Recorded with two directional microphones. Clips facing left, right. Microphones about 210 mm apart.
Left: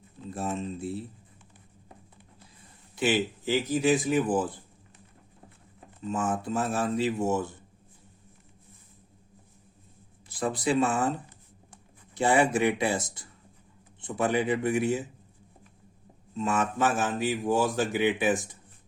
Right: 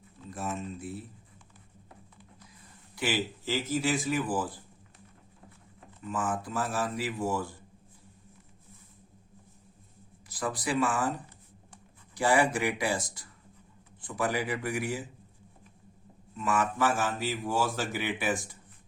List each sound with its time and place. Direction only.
0.3 s speech: 30° left (ahead or behind)
2.9 s speech: 20° left (ahead or behind)
6.0 s speech: 25° left (ahead or behind)
10.2 s speech: 25° left (ahead or behind)
16.3 s speech: 25° left (ahead or behind)